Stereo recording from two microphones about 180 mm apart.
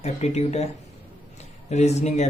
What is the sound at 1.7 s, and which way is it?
Speech, 40° left (ahead or behind).